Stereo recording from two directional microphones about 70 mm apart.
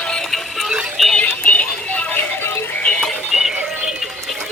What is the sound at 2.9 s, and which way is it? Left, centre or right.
Music, centre.